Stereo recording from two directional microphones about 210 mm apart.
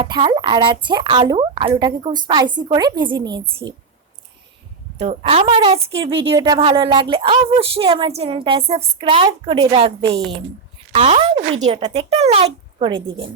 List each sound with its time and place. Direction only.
0.0 s speech: 20° right (ahead or behind)
4.9 s speech: 30° right (ahead or behind)
10.0 s a woman's voice: 55° right (ahead or behind)
10.9 s speech: 30° right (ahead or behind)